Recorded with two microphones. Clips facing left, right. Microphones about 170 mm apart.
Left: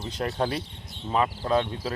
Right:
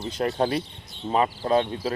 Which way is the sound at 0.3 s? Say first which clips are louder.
Right 3 dB; 20° right (ahead or behind).